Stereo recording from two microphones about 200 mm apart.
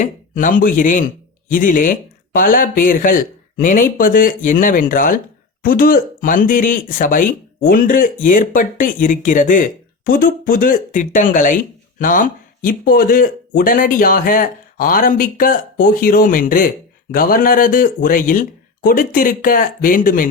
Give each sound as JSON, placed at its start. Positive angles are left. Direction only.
{"t": 0.0, "sound": "speech", "side_deg": 40}